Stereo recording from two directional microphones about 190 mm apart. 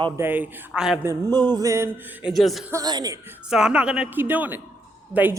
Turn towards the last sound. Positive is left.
turn(degrees=-10)  # may be behind; listen again after turning